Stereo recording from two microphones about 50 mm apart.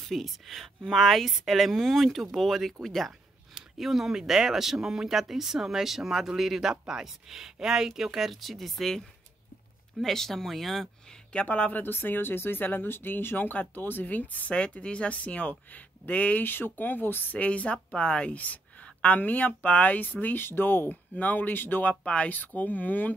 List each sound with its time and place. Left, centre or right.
0.0 s speech: centre
11.3 s speech: left
11.8 s speech: left
14.5 s speech: left
16.4 s speech: left
17.3 s speech: left
20.3 s speech: left
21.1 s speech: left
22.0 s speech: left